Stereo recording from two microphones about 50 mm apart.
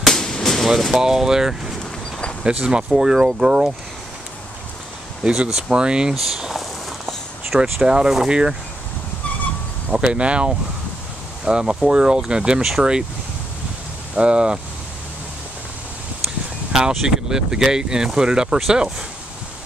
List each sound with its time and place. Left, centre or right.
0.0 s a sound: centre
0.7 s speech: centre
1.0 s speech: centre
2.4 s speech: centre
5.2 s speech: centre
6.2 s a sound: centre
7.8 s speech: centre
9.9 s speech: centre
14.1 s speech: centre
16.9 s speech: centre